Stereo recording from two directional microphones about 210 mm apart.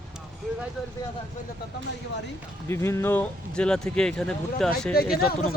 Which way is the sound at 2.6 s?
10° left (ahead or behind).